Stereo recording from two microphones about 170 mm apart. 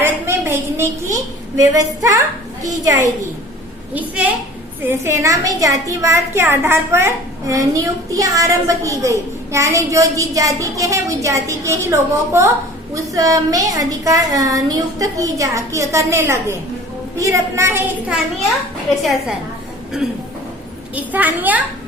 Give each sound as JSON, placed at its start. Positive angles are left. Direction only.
{"t": 0.0, "sound": "a sound", "side_deg": -15}
{"t": 2.6, "sound": "a woman's voice", "side_deg": -20}
{"t": 3.9, "sound": "a woman's voice", "side_deg": -10}
{"t": 20.9, "sound": "a woman's voice", "side_deg": -10}